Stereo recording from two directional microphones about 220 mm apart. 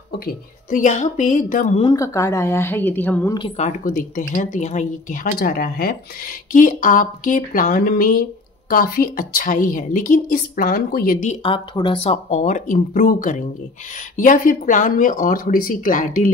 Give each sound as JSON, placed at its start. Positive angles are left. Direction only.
{"t": 0.7, "sound": "a woman's voice", "side_deg": 35}
{"t": 1.8, "sound": "a woman's voice", "side_deg": 20}
{"t": 3.3, "sound": "a woman's voice", "side_deg": 25}
{"t": 11.4, "sound": "a woman's voice", "side_deg": 25}